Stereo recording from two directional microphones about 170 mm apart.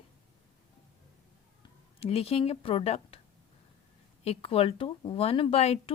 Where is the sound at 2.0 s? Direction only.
35° left (ahead or behind).